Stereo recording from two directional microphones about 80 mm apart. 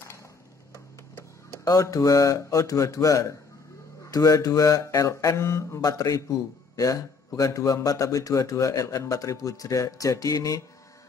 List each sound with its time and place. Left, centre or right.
1.6 s a man's voice: left
5.4 s speech: left
5.8 s a man's voice: left